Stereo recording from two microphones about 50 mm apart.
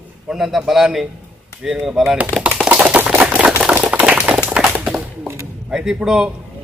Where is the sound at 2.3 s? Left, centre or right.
Left.